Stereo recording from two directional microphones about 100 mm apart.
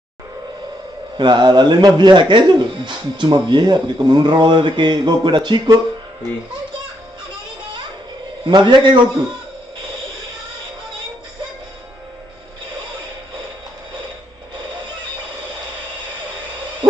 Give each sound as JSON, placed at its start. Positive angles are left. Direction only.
{"t": 1.1, "sound": "speech", "side_deg": -50}
{"t": 8.5, "sound": "speech", "side_deg": -50}